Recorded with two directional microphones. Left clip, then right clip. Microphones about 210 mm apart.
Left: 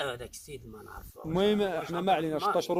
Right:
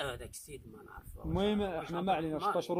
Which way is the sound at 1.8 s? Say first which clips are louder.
Left 4 dB; centre (ahead or behind).